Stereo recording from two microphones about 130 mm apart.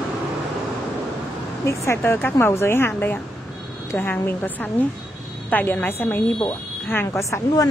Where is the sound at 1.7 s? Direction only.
20° left (ahead or behind).